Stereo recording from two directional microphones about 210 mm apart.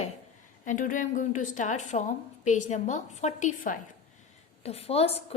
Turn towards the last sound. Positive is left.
turn(degrees=30)  # may be behind; listen again after turning